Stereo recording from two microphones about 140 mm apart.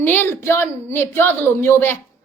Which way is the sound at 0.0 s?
15° left (ahead or behind).